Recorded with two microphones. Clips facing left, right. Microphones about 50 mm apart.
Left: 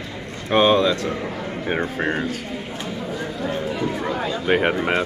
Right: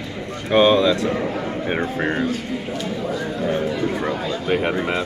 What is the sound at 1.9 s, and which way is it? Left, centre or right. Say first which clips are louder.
Speech: right 2 dB; centre.